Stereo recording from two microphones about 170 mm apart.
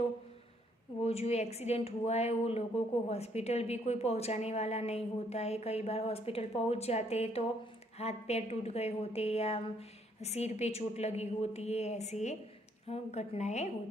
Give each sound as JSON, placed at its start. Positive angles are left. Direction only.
{"t": 1.0, "sound": "a woman's voice", "side_deg": 40}